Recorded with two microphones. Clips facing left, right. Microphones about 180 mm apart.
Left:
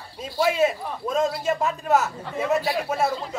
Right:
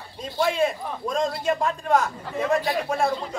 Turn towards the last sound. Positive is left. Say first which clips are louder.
# even
turn(degrees=5)  # may be behind; listen again after turning